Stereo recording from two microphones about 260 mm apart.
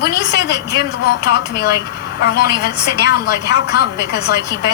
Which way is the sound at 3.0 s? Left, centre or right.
Left.